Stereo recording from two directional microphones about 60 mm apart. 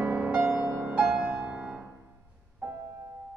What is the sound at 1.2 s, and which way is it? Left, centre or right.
Music, right.